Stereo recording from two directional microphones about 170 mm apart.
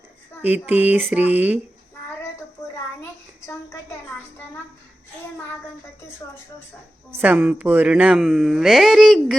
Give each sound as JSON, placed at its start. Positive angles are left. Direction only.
{"t": 0.4, "sound": "speech", "side_deg": -10}
{"t": 3.0, "sound": "a sound", "side_deg": 15}
{"t": 7.2, "sound": "speech", "side_deg": -10}